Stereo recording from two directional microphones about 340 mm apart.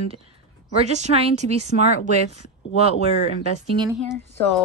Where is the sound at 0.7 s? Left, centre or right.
Centre.